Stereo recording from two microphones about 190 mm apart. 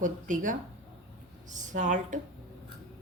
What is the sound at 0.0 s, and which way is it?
A woman's voice, 45° right (ahead or behind).